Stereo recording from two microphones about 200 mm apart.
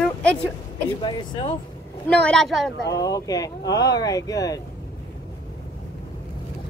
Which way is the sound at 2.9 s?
20° left (ahead or behind).